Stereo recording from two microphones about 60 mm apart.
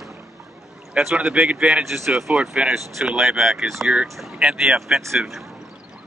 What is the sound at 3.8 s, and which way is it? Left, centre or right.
Speech, right.